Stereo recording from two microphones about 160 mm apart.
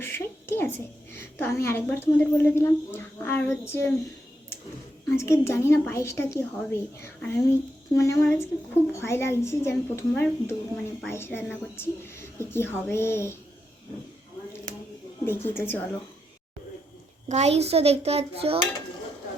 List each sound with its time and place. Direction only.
0.0 s a woman's voice: 15° left (ahead or behind)
5.1 s a woman's voice: 15° left (ahead or behind)
15.2 s a woman's voice: 15° left (ahead or behind)
17.2 s a child's voice: 45° right (ahead or behind)